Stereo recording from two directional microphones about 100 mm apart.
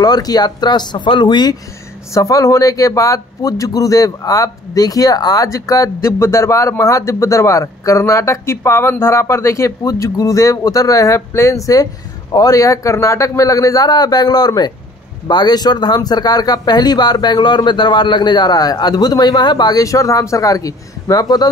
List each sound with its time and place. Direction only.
0.0 s speech: 40° left (ahead or behind)
2.1 s speech: 35° left (ahead or behind)